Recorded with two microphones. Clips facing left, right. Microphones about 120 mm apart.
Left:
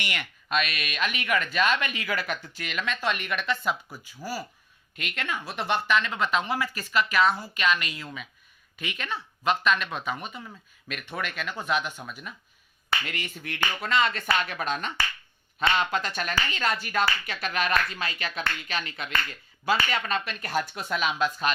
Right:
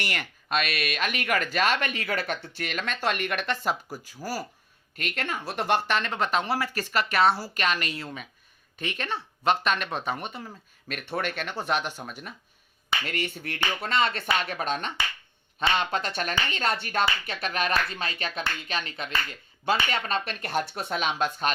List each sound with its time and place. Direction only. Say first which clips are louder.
0.0 s speech: right 2 dB; 40° right (ahead or behind)